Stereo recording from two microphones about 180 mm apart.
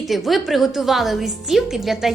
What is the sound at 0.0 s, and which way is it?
A woman's voice, centre (ahead or behind).